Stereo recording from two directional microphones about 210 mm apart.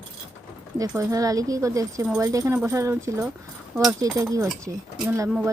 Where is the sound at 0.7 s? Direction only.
15° right (ahead or behind).